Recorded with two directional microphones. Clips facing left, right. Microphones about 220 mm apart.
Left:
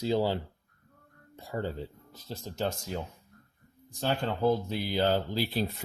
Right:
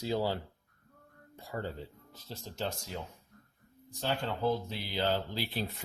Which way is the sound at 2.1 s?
45° left (ahead or behind).